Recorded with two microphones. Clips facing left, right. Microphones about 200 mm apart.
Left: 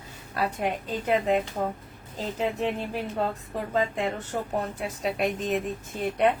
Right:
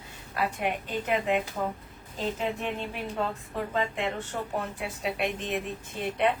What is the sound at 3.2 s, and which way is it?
Speech, 40° left (ahead or behind).